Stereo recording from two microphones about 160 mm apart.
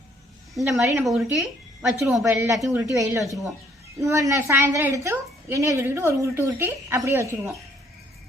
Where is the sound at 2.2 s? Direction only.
20° right (ahead or behind).